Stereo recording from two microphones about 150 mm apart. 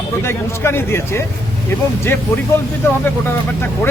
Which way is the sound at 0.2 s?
15° left (ahead or behind).